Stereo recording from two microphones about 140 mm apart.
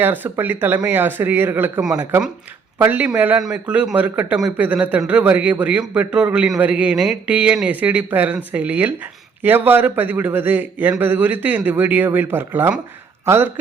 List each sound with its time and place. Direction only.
0.0 s speech: 15° right (ahead or behind)